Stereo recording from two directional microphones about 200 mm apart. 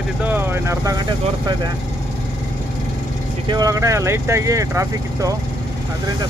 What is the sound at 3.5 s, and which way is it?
Speech, 15° right (ahead or behind).